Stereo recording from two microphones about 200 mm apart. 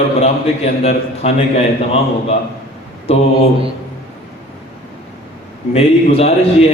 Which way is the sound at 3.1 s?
30° left (ahead or behind).